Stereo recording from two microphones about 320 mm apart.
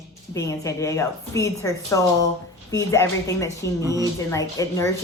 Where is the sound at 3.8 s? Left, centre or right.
Centre.